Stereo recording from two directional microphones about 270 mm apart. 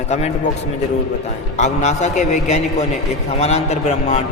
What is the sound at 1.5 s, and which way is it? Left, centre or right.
A man's voice, left.